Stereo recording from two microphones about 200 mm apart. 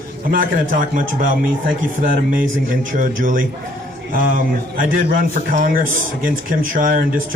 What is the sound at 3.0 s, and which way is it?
A man's voice, 45° right (ahead or behind).